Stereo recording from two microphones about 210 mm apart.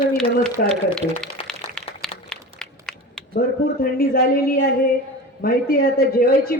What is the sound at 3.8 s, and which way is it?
A man's voice, 45° left (ahead or behind).